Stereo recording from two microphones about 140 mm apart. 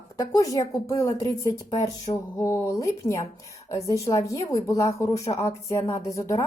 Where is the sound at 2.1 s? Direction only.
40° left (ahead or behind).